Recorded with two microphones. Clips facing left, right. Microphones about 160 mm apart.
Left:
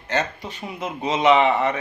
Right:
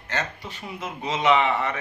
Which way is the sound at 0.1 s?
20° left (ahead or behind).